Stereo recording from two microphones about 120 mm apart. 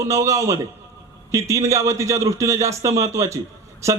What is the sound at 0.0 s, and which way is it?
A man's voice, 25° right (ahead or behind).